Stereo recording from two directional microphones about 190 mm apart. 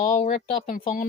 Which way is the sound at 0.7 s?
45° left (ahead or behind).